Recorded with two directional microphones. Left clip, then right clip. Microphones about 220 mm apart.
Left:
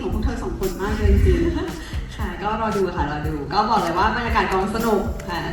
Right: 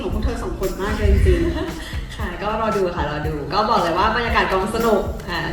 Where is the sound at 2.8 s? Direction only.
30° right (ahead or behind).